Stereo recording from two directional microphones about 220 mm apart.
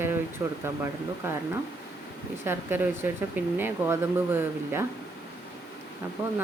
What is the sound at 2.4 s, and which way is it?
A woman's voice, 10° right (ahead or behind).